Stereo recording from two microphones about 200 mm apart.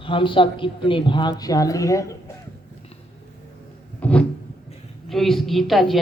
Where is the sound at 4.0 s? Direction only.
5° left (ahead or behind).